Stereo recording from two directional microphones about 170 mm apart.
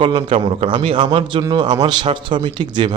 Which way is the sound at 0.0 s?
30° right (ahead or behind).